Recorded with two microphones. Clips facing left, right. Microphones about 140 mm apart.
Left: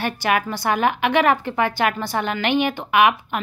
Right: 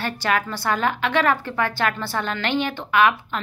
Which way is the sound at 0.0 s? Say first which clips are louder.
Left 2 dB; 15° left (ahead or behind).